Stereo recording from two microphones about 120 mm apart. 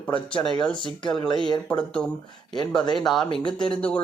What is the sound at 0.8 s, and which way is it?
Speech, 40° left (ahead or behind).